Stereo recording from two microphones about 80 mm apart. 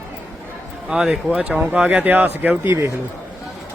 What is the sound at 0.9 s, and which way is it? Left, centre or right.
Speech, centre.